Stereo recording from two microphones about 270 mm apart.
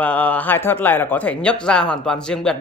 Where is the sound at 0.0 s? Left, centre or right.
Centre.